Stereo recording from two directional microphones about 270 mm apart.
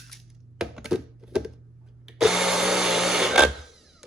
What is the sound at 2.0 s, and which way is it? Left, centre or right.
Tools, centre.